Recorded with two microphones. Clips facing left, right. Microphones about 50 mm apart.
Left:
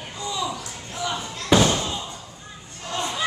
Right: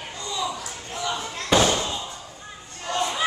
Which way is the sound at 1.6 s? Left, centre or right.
Centre.